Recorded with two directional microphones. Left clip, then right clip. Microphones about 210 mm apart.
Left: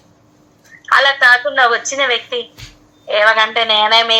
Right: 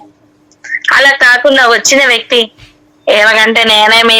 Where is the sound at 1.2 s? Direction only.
50° right (ahead or behind).